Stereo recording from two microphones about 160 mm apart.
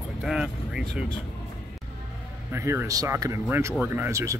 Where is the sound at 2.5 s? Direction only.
15° right (ahead or behind).